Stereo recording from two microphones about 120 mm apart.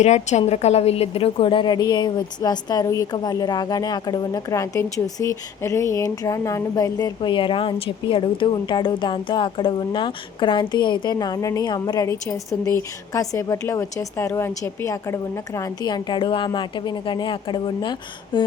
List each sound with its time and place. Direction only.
0.0 s a woman's voice: 70° left (ahead or behind); by 18.5 s 40° left (ahead or behind)